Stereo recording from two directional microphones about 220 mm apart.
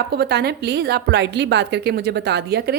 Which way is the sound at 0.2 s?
45° right (ahead or behind).